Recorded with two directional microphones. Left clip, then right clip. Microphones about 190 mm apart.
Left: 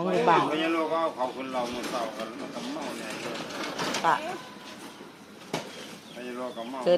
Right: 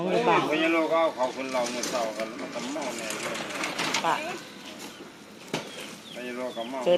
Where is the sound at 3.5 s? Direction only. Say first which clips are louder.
Right 2 dB; 50° left (ahead or behind).